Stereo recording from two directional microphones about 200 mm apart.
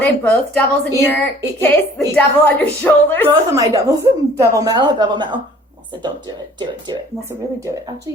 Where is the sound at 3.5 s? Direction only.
15° right (ahead or behind).